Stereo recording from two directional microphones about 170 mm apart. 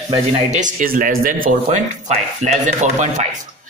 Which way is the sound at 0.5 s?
45° right (ahead or behind).